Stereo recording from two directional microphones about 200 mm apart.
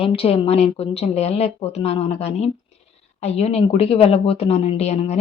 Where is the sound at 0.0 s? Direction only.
30° left (ahead or behind).